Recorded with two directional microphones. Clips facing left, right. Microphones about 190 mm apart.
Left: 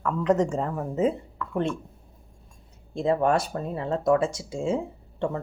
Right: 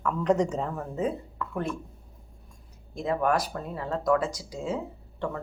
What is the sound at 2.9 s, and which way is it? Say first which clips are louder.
Speech: left 3 dB; 30° left (ahead or behind).